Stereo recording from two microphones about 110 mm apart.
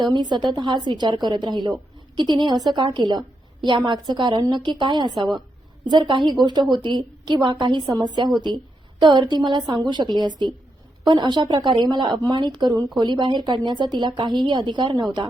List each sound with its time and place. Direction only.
0.0 s a woman's voice: 40° right (ahead or behind)